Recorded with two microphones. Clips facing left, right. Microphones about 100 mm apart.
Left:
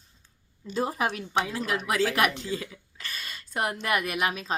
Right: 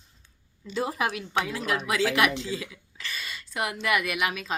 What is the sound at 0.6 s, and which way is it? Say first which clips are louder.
A woman's voice: even; 40° left (ahead or behind).